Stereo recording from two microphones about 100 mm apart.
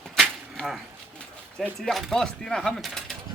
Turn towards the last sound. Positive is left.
turn(degrees=0)  # may be behind; listen again after turning